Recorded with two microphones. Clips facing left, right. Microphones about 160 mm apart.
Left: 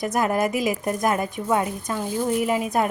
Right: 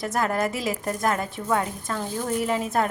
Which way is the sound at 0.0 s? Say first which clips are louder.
Left 3 dB; 20° left (ahead or behind).